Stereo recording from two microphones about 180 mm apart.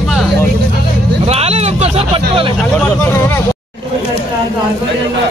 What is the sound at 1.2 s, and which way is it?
Vehicle, 35° right (ahead or behind).